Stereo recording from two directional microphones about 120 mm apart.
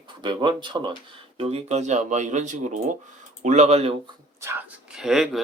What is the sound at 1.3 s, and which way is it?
Speech, 60° right (ahead or behind).